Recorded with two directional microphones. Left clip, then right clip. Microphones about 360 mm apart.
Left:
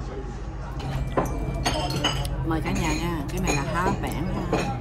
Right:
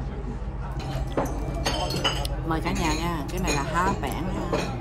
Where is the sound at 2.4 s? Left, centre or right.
Centre.